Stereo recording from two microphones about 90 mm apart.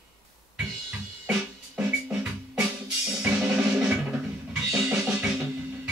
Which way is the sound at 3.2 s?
10° right (ahead or behind).